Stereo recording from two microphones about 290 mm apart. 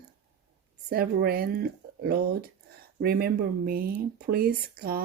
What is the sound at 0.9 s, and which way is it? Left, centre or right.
Speech, right.